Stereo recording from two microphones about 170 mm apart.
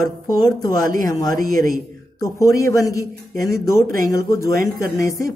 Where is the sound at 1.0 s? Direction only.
20° left (ahead or behind).